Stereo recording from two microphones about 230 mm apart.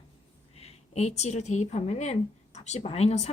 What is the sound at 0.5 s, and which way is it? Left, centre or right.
A woman's voice, left.